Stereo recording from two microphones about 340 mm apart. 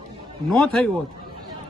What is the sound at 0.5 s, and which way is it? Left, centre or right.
Speech, centre.